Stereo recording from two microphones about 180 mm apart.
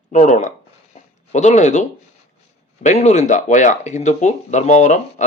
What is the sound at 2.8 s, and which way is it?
Speech, 40° left (ahead or behind).